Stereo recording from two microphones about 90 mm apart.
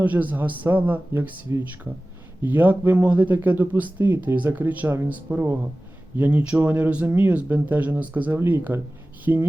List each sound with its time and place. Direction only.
0.0 s a man's voice: 20° right (ahead or behind)